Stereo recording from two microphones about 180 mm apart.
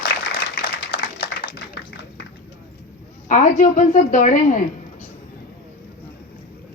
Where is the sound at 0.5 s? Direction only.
60° left (ahead or behind).